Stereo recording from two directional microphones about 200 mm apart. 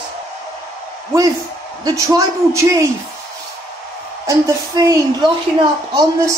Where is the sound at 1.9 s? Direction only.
15° right (ahead or behind).